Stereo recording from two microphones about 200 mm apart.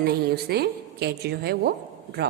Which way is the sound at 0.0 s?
50° right (ahead or behind).